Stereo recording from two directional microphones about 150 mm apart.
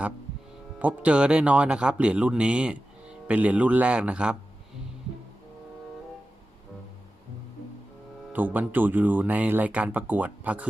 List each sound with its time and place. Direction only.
0.8 s speech: 10° right (ahead or behind)
8.3 s speech: 10° right (ahead or behind)